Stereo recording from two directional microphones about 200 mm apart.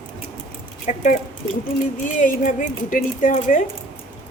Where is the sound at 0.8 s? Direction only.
40° left (ahead or behind).